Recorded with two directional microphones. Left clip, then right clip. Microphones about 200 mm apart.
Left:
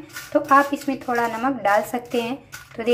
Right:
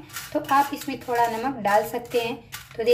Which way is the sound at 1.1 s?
Centre (ahead or behind).